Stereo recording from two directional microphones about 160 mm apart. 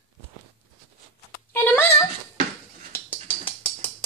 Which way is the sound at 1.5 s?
15° left (ahead or behind).